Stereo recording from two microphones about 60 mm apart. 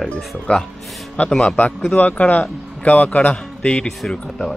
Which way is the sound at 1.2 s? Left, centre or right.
Centre.